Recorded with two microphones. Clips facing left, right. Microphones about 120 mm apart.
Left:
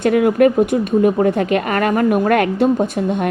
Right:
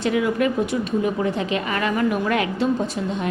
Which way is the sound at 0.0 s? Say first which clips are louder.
Left 8 dB; 55° left (ahead or behind).